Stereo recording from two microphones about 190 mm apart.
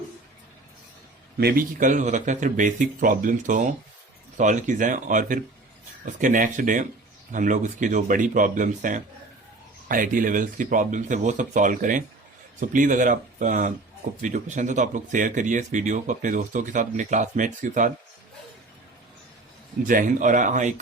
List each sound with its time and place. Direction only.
1.4 s speech: 55° right (ahead or behind)
19.9 s speech: 45° right (ahead or behind)